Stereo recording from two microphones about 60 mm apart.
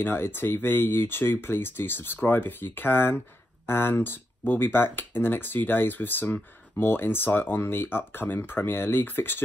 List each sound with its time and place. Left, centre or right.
0.0 s speech: left